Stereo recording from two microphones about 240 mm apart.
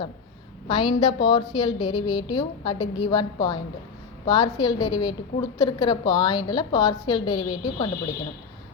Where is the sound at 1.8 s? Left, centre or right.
Left.